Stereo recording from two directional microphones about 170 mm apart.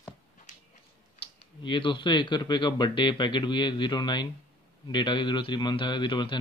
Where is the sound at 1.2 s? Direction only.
30° left (ahead or behind).